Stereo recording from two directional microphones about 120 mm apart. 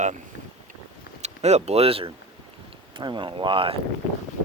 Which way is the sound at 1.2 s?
65° right (ahead or behind).